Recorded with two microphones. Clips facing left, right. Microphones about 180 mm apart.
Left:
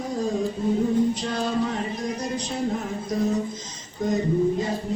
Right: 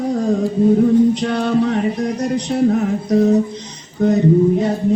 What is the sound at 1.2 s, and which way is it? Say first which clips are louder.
Music: right 8 dB; 65° right (ahead or behind).